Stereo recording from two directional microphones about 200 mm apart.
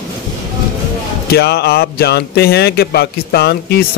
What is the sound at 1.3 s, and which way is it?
Speech, 55° left (ahead or behind).